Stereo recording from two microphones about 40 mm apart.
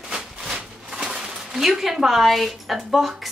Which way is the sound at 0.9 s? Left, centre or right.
Centre.